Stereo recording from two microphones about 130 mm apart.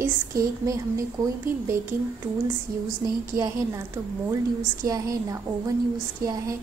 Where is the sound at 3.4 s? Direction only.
25° right (ahead or behind).